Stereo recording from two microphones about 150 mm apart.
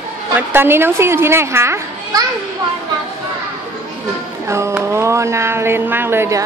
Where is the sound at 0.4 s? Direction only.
15° right (ahead or behind).